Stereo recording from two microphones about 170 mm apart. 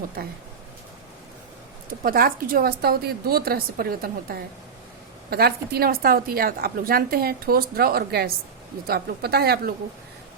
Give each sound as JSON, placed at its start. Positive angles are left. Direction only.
{"t": 0.2, "sound": "a woman's voice", "side_deg": -65}
{"t": 2.0, "sound": "a woman's voice", "side_deg": -55}